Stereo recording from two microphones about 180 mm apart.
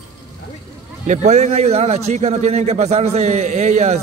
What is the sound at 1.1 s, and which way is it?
Speech, 40° right (ahead or behind).